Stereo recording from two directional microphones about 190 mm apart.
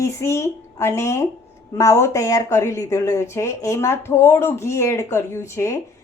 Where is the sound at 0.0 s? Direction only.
15° left (ahead or behind).